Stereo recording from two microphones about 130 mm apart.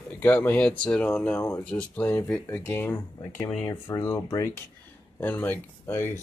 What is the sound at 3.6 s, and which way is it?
Speech, 25° left (ahead or behind).